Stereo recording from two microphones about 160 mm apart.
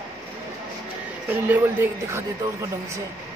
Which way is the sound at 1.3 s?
10° right (ahead or behind).